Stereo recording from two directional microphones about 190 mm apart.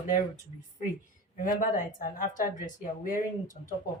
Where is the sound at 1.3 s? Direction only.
45° left (ahead or behind).